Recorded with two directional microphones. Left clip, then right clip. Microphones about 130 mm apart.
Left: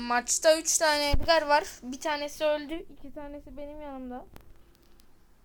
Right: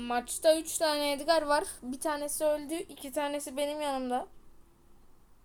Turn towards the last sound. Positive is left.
turn(degrees=-5)  # may be behind; listen again after turning